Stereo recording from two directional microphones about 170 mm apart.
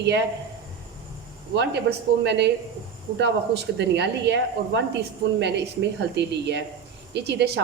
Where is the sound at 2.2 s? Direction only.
90° right.